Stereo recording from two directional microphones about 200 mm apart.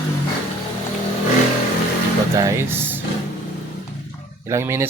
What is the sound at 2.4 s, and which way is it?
Speech, 15° right (ahead or behind).